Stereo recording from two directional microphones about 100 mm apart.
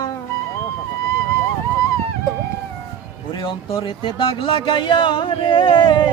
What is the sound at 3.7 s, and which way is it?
Speech, 60° left (ahead or behind).